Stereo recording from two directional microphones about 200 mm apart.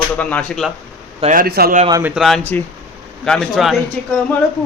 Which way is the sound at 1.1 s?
35° right (ahead or behind).